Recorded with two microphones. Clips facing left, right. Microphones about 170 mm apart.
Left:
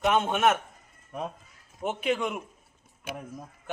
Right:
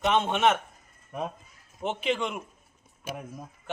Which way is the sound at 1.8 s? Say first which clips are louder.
Left 1 dB; 5° left (ahead or behind).